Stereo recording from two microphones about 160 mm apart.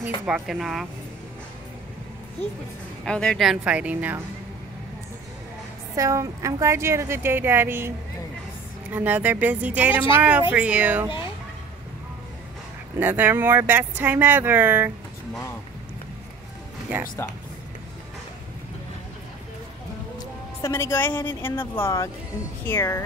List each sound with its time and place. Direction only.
0.0 s speech: 5° right (ahead or behind)
3.1 s speech: 5° left (ahead or behind)
5.9 s speech: 20° right (ahead or behind)
8.9 s speech: 10° right (ahead or behind)
13.0 s speech: 10° right (ahead or behind)
20.6 s speech: 15° left (ahead or behind)